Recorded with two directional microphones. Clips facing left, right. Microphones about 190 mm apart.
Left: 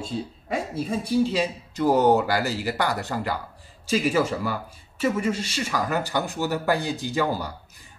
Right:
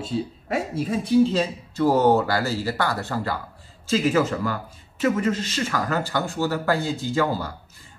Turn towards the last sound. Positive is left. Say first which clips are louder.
# right 2 dB
turn(degrees=15)  # may be behind; listen again after turning